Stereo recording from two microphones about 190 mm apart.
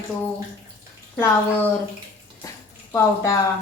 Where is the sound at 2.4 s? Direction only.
15° left (ahead or behind).